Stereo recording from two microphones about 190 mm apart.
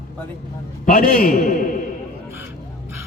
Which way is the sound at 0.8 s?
50° left (ahead or behind).